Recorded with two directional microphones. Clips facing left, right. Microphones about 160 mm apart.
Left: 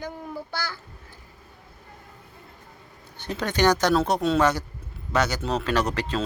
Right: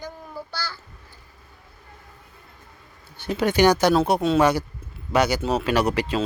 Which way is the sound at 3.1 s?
10° right (ahead or behind).